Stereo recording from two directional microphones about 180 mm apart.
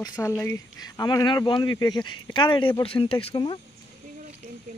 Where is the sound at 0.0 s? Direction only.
15° left (ahead or behind).